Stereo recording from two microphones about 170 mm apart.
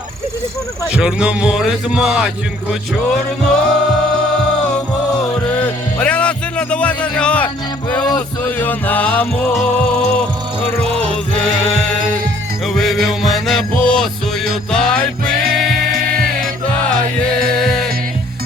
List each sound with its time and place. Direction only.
0.9 s music: 5° right (ahead or behind)
5.5 s music: 5° left (ahead or behind)
11.1 s music: 5° left (ahead or behind)